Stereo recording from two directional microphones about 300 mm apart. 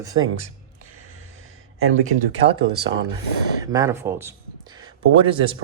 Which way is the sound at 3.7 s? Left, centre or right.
Centre.